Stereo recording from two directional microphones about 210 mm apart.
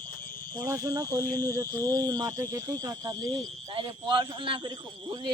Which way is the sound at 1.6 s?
10° left (ahead or behind).